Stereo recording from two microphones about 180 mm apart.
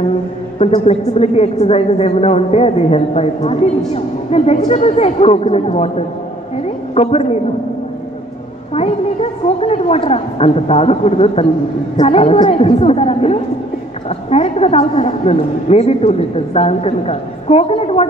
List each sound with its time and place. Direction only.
0.6 s a man's voice: 35° left (ahead or behind)
8.7 s a man's voice: 35° left (ahead or behind)